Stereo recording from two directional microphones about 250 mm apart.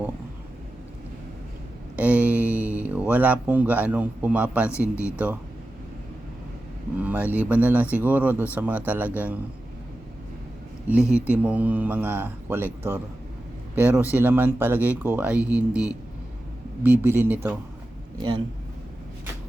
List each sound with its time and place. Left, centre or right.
2.0 s speech: centre
7.0 s a man's voice: centre
10.8 s a man's voice: centre
13.7 s a man's voice: centre
16.8 s a man's voice: centre
18.2 s a man's voice: centre